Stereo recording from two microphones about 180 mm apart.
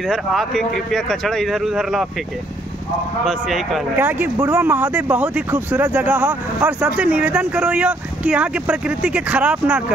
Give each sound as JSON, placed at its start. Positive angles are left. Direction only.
{"t": 0.1, "sound": "speech", "side_deg": 0}
{"t": 3.3, "sound": "speech", "side_deg": 0}